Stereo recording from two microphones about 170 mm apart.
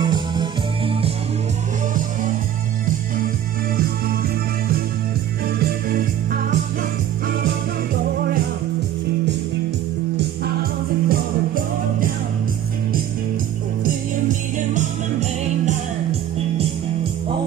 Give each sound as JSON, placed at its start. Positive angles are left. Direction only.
{"t": 0.0, "sound": "music", "side_deg": -25}
{"t": 5.6, "sound": "music", "side_deg": -60}
{"t": 11.1, "sound": "music", "side_deg": -55}
{"t": 14.7, "sound": "music", "side_deg": -45}